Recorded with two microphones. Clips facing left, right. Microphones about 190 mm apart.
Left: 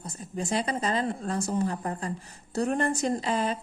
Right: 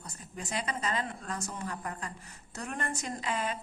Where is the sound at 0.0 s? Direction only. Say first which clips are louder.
Left 9 dB; 30° left (ahead or behind).